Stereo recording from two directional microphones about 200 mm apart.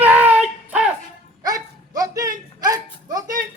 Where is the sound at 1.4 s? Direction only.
20° right (ahead or behind).